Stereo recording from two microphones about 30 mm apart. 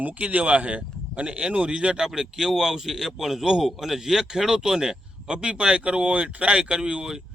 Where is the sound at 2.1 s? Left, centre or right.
Centre.